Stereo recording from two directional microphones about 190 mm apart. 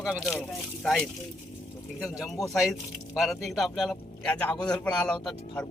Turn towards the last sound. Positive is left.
turn(degrees=5)  # may be behind; listen again after turning